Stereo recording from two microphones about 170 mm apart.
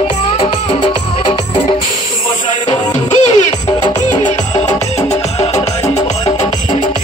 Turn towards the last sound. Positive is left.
turn(degrees=40)  # may be behind; listen again after turning